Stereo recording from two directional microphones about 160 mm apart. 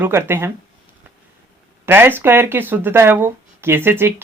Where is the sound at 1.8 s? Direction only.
15° right (ahead or behind).